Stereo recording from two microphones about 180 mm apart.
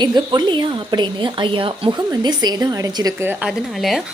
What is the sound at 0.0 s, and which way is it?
A woman's voice, 25° right (ahead or behind).